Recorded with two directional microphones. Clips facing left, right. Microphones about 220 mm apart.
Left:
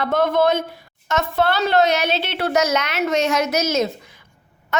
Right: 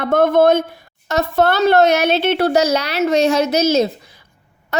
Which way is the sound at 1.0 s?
40° right (ahead or behind).